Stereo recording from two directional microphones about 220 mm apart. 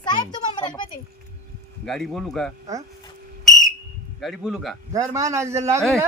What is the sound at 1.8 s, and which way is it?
Speech, centre (ahead or behind).